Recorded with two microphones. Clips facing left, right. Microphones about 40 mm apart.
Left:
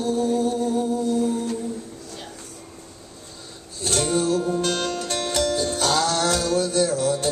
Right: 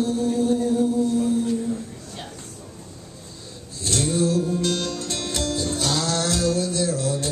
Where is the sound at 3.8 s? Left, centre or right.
Left.